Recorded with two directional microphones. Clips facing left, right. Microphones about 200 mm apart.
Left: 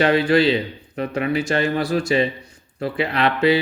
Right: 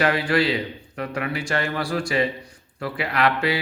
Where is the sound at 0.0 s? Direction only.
25° left (ahead or behind).